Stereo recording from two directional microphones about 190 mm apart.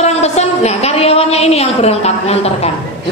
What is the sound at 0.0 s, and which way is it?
A woman's voice, 35° left (ahead or behind).